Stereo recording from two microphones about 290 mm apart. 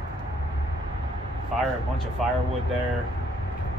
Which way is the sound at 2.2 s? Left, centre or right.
Centre.